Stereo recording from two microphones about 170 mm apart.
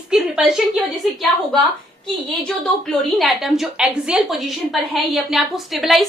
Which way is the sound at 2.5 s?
5° left (ahead or behind).